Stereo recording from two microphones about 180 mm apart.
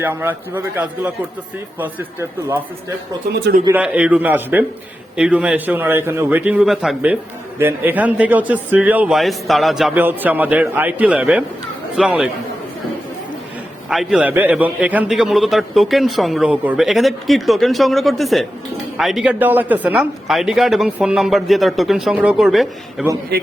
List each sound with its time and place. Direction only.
0.0 s speech: 10° right (ahead or behind)
3.7 s a man's voice: 10° right (ahead or behind)
13.9 s a man's voice: centre (ahead or behind)
23.3 s a man's voice: 60° right (ahead or behind)